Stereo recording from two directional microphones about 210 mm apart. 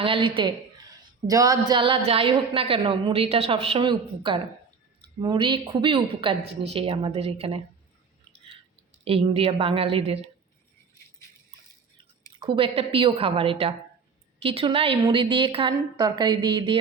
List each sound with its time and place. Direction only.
0.0 s a woman's voice: 25° right (ahead or behind)
9.0 s a woman's voice: 25° right (ahead or behind)
12.4 s a woman's voice: 25° right (ahead or behind)